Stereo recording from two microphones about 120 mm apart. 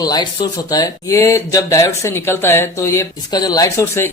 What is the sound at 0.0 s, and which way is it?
Speech, 35° left (ahead or behind).